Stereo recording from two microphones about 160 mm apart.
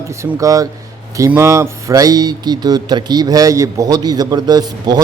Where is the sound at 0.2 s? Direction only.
20° right (ahead or behind).